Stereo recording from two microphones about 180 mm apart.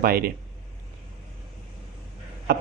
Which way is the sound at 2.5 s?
60° right (ahead or behind).